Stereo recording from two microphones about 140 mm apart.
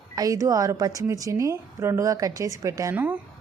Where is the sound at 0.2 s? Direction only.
25° right (ahead or behind).